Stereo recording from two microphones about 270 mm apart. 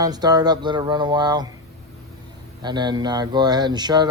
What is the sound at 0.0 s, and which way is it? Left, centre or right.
Speech, centre.